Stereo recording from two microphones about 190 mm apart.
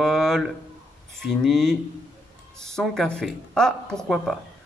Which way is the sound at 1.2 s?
Centre (ahead or behind).